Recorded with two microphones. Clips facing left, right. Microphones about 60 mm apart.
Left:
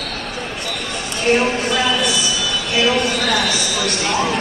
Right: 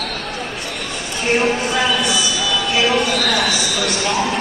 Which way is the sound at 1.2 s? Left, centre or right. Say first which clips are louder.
Left 1 dB; centre.